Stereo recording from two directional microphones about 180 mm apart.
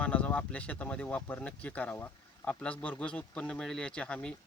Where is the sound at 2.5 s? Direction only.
5° left (ahead or behind).